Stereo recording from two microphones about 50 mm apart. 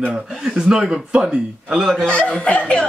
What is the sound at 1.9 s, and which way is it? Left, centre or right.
Speech, centre.